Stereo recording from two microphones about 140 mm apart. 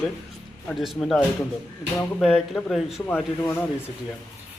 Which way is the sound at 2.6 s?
5° left (ahead or behind).